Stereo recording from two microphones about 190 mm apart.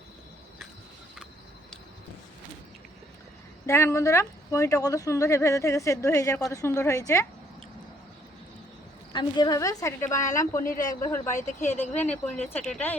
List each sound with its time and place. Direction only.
3.7 s a woman's voice: 15° left (ahead or behind)
9.1 s a woman's voice: 20° left (ahead or behind); by 13.0 s 5° left (ahead or behind)